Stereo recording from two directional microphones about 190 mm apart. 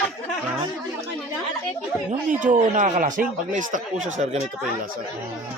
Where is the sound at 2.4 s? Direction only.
45° right (ahead or behind).